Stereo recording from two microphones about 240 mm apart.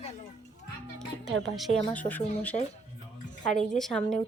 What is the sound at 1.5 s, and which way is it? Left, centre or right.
Speech, centre.